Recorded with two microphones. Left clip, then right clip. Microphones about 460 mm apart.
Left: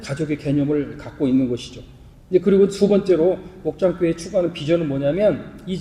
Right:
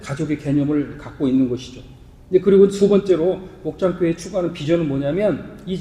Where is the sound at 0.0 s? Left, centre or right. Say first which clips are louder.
Even; centre.